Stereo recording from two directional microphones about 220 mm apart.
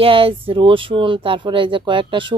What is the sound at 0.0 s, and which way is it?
Speech, 25° right (ahead or behind).